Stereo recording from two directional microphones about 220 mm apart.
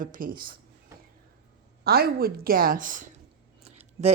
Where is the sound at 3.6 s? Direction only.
30° right (ahead or behind).